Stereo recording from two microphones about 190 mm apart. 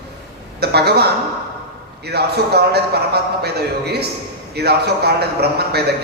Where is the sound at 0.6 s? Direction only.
60° right (ahead or behind).